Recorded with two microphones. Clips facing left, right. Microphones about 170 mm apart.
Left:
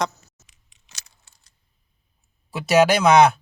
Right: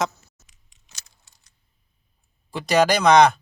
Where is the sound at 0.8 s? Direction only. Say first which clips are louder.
Left 2 dB; 80° left.